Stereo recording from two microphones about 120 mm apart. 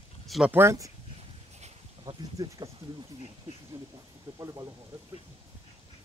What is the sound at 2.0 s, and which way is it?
Speech, 35° right (ahead or behind).